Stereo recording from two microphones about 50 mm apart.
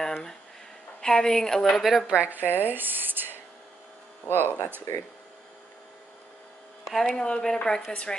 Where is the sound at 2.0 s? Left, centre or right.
Right.